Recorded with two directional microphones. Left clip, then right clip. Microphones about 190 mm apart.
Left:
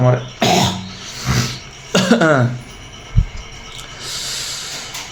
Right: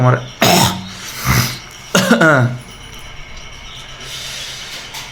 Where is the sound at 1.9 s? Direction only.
5° right (ahead or behind).